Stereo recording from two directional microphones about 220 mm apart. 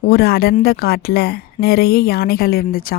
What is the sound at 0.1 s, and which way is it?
A woman's voice, 45° left (ahead or behind).